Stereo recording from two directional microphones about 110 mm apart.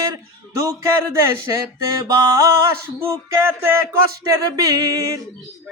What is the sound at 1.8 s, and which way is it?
Speech, 30° right (ahead or behind).